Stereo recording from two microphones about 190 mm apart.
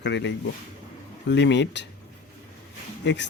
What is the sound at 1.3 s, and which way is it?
Speech, 65° left (ahead or behind).